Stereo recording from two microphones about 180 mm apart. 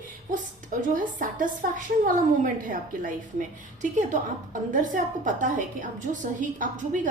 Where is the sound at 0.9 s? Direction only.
45° right (ahead or behind).